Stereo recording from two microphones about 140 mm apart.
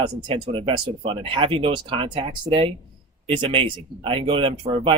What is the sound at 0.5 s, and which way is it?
Speech, 35° right (ahead or behind).